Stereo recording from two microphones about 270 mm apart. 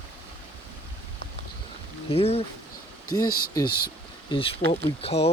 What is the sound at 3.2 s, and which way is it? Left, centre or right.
Speech, left.